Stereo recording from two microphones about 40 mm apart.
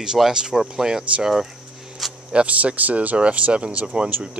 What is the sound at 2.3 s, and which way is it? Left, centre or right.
Speech, right.